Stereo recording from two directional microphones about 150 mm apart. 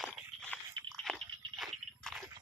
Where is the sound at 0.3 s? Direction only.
45° right (ahead or behind).